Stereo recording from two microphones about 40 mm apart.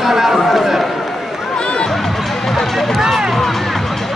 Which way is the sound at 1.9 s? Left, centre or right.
Centre.